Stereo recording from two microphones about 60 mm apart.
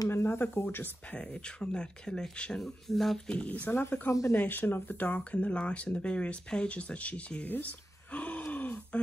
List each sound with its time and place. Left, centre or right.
0.1 s speech: left
1.1 s speech: centre
2.6 s speech: centre
3.3 s speech: left
4.3 s speech: left
7.5 s groan: left